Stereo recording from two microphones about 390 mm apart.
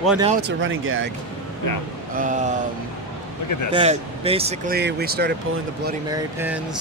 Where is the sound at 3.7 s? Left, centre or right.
Centre.